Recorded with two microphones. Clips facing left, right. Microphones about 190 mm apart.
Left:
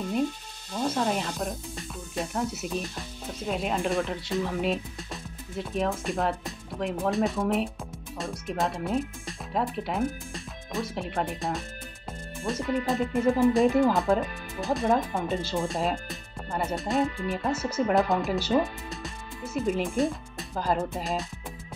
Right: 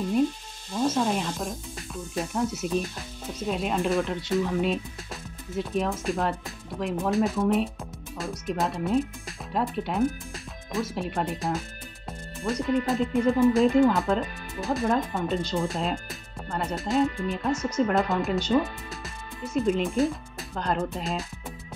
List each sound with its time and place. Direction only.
0.7 s speech: 5° right (ahead or behind)
12.1 s music: centre (ahead or behind)
13.5 s speech: centre (ahead or behind)